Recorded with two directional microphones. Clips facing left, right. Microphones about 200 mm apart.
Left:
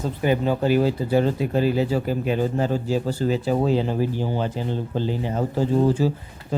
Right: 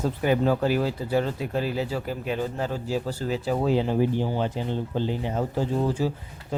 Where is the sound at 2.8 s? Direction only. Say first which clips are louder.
Left 5 dB; 5° right (ahead or behind).